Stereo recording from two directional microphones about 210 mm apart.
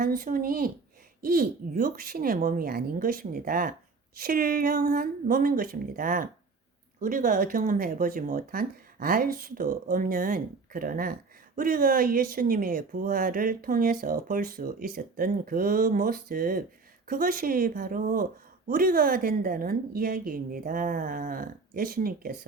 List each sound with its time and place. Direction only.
0.2 s speech: 40° right (ahead or behind)